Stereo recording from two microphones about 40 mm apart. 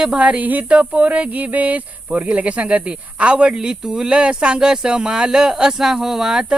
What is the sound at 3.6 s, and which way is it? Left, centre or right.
Speech, centre.